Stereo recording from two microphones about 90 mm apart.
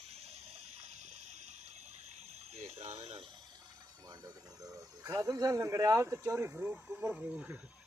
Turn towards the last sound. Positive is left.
turn(degrees=-10)  # may be behind; listen again after turning